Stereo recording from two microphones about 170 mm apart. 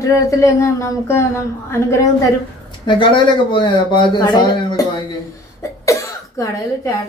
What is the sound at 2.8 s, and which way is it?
Speech, 30° left (ahead or behind).